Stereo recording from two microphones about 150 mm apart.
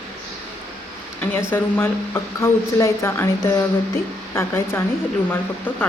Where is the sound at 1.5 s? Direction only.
15° left (ahead or behind).